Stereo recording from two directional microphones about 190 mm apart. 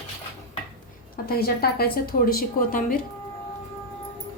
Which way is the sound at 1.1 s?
50° left (ahead or behind).